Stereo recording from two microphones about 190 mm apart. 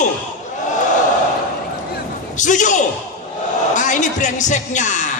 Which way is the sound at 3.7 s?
40° left (ahead or behind).